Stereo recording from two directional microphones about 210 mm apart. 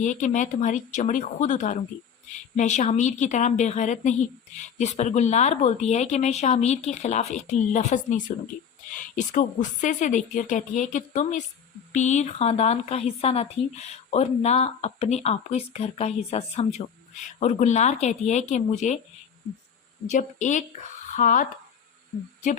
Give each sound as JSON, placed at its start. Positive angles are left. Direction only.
{"t": 0.0, "sound": "a woman's voice", "side_deg": 35}
{"t": 20.1, "sound": "a woman's voice", "side_deg": 35}